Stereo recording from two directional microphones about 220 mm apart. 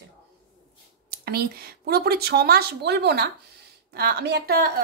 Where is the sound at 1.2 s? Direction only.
45° right (ahead or behind).